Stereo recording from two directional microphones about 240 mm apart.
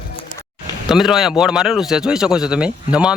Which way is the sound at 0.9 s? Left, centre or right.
Centre.